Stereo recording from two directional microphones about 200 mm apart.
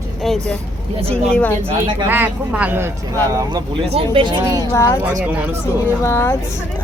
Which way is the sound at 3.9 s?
25° right (ahead or behind).